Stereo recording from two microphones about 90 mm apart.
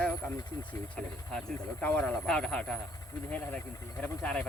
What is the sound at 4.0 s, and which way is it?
Speech, 15° left (ahead or behind).